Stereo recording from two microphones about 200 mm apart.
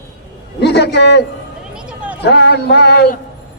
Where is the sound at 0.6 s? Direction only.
55° left (ahead or behind).